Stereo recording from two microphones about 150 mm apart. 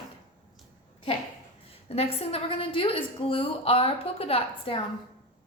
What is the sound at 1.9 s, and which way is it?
A woman's voice, 45° left (ahead or behind).